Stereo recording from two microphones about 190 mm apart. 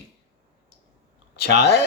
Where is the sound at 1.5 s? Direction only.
60° left (ahead or behind).